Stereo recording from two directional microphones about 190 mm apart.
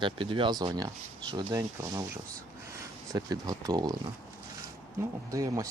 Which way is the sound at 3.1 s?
20° right (ahead or behind).